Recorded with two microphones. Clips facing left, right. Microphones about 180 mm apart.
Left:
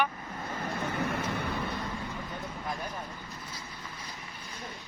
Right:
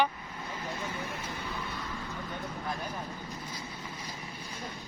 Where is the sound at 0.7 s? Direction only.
60° left (ahead or behind).